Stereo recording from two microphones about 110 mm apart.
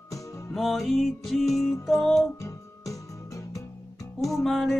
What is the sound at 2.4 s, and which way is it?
Music, 30° left (ahead or behind).